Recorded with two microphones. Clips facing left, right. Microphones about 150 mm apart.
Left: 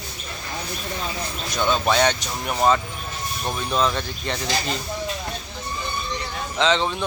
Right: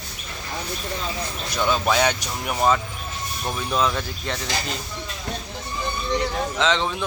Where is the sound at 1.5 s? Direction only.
5° right (ahead or behind).